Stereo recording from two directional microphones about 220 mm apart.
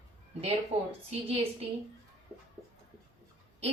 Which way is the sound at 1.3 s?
25° right (ahead or behind).